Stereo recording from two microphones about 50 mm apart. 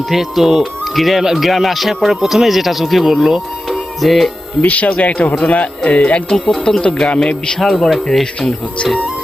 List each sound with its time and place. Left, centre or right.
0.1 s speech: centre
4.6 s speech: left
6.2 s speech: centre
7.6 s speech: centre